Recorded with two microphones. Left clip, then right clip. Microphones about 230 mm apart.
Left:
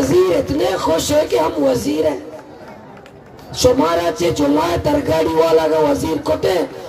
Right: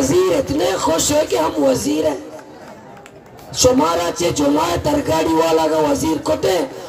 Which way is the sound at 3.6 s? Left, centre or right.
Right.